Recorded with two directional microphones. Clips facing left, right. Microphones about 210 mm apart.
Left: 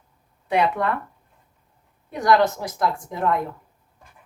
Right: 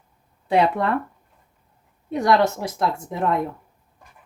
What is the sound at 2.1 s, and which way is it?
A woman's voice, 25° right (ahead or behind).